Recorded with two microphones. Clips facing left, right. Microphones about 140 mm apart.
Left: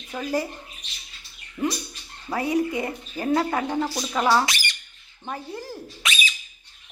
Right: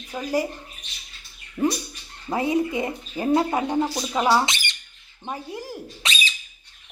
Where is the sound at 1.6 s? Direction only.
20° right (ahead or behind).